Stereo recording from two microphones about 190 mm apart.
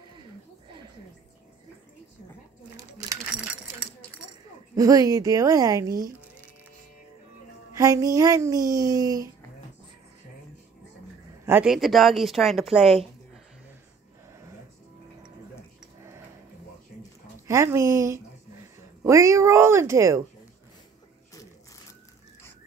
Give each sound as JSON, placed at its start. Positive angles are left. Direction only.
{"t": 4.7, "sound": "a woman's voice", "side_deg": -20}
{"t": 7.7, "sound": "speech", "side_deg": -15}
{"t": 11.4, "sound": "speech", "side_deg": -5}
{"t": 17.5, "sound": "speech", "side_deg": -15}